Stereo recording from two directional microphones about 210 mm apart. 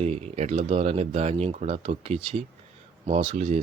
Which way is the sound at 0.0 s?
30° right (ahead or behind).